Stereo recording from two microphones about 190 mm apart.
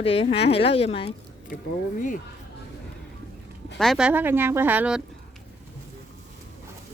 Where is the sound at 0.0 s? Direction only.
30° left (ahead or behind).